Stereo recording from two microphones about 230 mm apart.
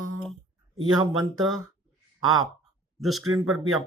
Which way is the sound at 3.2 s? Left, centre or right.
Right.